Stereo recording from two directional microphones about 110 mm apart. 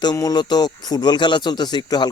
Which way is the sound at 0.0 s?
35° left (ahead or behind).